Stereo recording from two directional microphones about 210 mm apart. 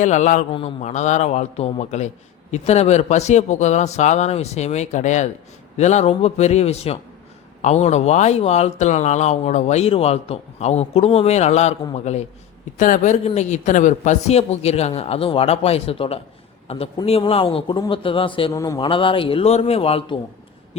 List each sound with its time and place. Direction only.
0.0 s a man's voice: 35° left (ahead or behind)